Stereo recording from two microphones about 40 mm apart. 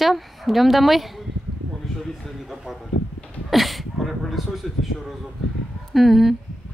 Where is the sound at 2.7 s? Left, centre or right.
Centre.